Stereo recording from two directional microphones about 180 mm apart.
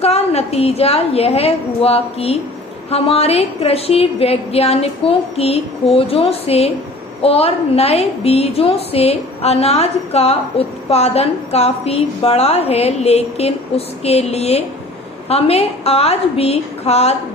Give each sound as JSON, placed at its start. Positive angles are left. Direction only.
{"t": 0.0, "sound": "a woman's voice", "side_deg": 35}